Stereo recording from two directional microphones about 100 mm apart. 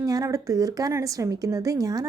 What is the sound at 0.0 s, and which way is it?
A woman's voice, 35° right (ahead or behind).